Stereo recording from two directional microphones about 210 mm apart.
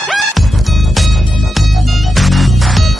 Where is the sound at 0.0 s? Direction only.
Centre (ahead or behind).